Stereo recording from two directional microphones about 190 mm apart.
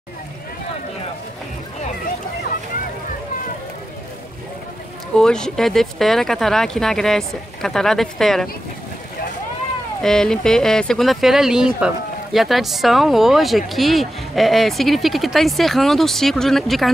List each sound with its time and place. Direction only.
5.1 s speech: 5° left (ahead or behind)
10.0 s speech: 5° left (ahead or behind)